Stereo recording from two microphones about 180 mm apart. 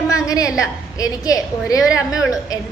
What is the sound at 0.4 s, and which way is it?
Speech, 5° right (ahead or behind).